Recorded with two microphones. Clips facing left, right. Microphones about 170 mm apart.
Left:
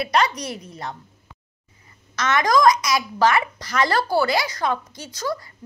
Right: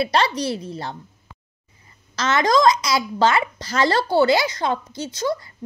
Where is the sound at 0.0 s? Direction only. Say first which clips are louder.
Right 1 dB; 30° right (ahead or behind).